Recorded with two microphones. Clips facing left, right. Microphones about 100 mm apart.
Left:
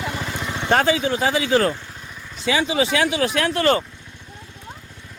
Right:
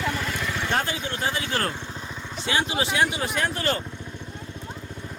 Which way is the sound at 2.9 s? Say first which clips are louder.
Left 4 dB; 90° left.